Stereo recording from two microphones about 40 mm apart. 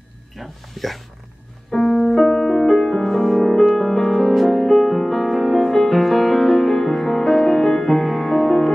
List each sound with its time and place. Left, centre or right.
0.4 s speech: centre
1.9 s music: left
2.1 s music: centre